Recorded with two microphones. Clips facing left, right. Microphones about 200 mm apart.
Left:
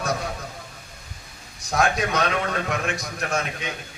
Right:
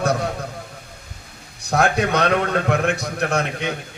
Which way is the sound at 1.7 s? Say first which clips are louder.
Right 4 dB; 60° right (ahead or behind).